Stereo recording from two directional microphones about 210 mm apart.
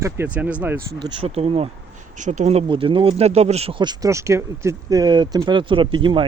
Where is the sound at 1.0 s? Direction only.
25° right (ahead or behind).